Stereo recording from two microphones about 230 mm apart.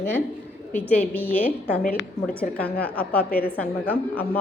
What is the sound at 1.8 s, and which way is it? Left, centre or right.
Speech, left.